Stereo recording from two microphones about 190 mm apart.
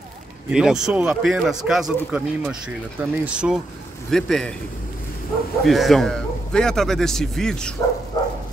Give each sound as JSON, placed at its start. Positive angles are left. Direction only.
{"t": 0.5, "sound": "speech", "side_deg": -5}
{"t": 5.6, "sound": "speech", "side_deg": 0}
{"t": 8.2, "sound": "a sound", "side_deg": 20}